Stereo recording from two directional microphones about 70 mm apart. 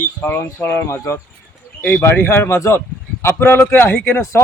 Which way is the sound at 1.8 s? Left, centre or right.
Left.